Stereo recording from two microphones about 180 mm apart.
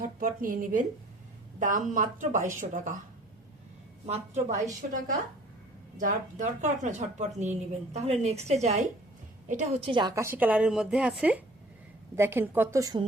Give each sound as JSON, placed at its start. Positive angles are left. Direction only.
{"t": 0.0, "sound": "speech", "side_deg": -50}
{"t": 4.0, "sound": "a woman's voice", "side_deg": -40}
{"t": 9.8, "sound": "a woman's voice", "side_deg": -25}